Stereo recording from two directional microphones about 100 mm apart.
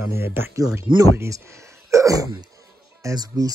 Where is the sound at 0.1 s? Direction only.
25° right (ahead or behind).